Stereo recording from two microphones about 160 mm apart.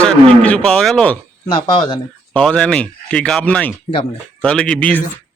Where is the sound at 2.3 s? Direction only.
5° left (ahead or behind).